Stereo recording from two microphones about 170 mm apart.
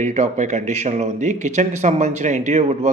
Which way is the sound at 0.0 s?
45° right (ahead or behind).